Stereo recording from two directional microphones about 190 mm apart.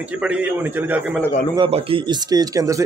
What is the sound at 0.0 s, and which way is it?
A man's voice, 5° right (ahead or behind).